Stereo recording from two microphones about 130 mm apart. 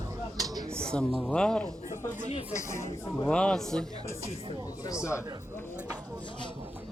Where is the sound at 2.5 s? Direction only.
20° left (ahead or behind).